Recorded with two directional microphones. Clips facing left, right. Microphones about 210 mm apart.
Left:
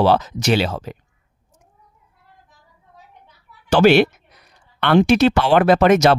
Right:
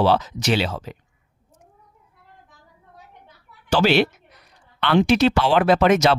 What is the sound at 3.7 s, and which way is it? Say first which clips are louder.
Speech: left 5 dB; 55° left (ahead or behind).